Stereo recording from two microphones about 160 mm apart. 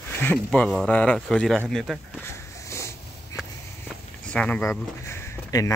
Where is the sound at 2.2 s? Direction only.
15° left (ahead or behind).